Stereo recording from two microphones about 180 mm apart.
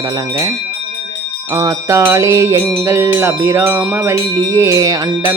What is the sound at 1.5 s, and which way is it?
Music, 15° right (ahead or behind).